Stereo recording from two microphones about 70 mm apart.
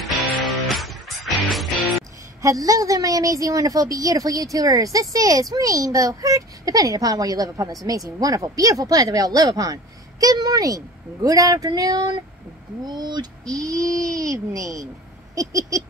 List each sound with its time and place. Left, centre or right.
0.0 s music: centre
2.4 s a woman's voice: right
12.8 s speech: right
13.5 s a child's voice: right